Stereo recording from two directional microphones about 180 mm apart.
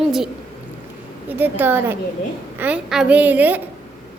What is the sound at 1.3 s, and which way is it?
A woman's voice, 10° right (ahead or behind).